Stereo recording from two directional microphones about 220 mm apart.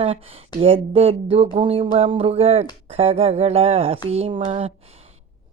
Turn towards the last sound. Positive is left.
turn(degrees=-25)  # may be behind; listen again after turning